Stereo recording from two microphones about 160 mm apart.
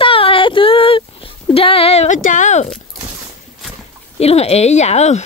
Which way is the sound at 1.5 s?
35° left (ahead or behind).